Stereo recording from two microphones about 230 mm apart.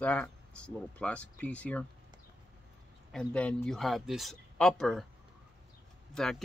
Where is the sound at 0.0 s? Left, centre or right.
Centre.